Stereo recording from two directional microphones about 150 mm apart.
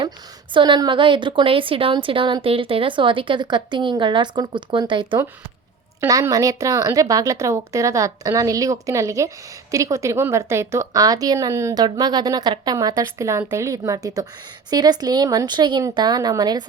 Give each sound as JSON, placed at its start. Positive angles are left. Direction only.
{"t": 0.5, "sound": "a woman's voice", "side_deg": -30}
{"t": 6.0, "sound": "a woman's voice", "side_deg": -20}